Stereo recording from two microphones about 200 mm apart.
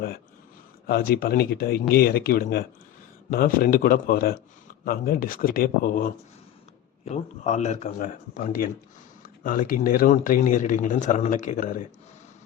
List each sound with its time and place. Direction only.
0.9 s speech: 50° left (ahead or behind)